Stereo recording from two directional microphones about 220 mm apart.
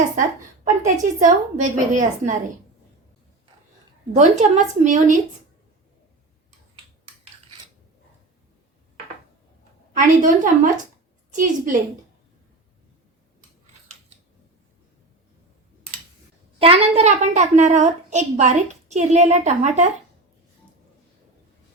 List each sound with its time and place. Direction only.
0.2 s a woman's voice: 35° right (ahead or behind)
4.1 s a woman's voice: 35° right (ahead or behind)
10.0 s a woman's voice: 35° right (ahead or behind)
16.6 s a woman's voice: 25° right (ahead or behind)